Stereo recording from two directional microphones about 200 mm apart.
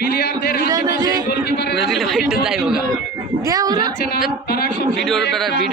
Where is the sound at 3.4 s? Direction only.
15° right (ahead or behind).